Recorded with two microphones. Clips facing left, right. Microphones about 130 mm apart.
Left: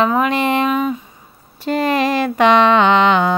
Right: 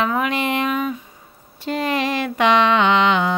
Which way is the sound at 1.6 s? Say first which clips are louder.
Left 5 dB; 45° left (ahead or behind).